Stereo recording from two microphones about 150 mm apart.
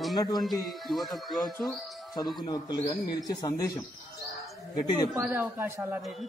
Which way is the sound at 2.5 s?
25° left (ahead or behind).